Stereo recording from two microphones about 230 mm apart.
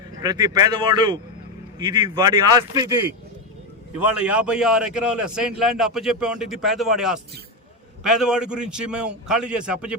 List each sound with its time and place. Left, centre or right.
0.2 s a man's voice: centre
4.0 s a man's voice: centre